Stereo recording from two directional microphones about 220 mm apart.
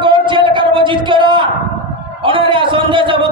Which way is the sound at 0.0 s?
20° right (ahead or behind).